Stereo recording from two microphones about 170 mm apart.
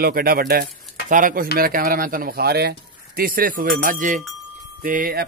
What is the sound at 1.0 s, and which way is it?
Speech, 50° right (ahead or behind).